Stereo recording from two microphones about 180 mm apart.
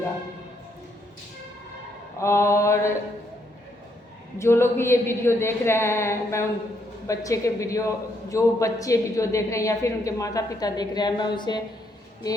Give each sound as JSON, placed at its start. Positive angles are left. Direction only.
{"t": 2.1, "sound": "a woman's voice", "side_deg": 15}
{"t": 4.4, "sound": "a woman's voice", "side_deg": 15}